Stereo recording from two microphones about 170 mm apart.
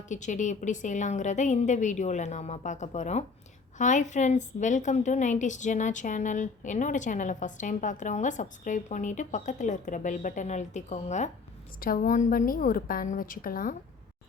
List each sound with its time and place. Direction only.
0.1 s a woman's voice: 45° left (ahead or behind)